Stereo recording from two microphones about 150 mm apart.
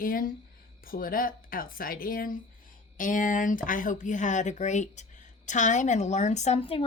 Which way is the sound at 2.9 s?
60° left (ahead or behind).